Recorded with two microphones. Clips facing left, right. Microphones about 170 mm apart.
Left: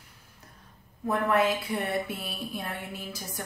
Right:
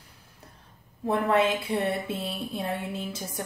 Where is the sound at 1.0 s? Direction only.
25° right (ahead or behind).